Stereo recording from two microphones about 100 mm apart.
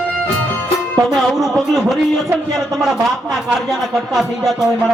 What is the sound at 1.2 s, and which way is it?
Speech, centre (ahead or behind).